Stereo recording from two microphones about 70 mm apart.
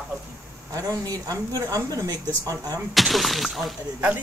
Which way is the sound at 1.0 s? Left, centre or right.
Right.